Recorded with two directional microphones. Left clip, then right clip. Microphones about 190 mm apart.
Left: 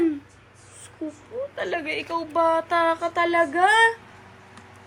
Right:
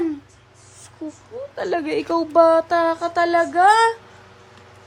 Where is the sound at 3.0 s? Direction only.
70° right (ahead or behind).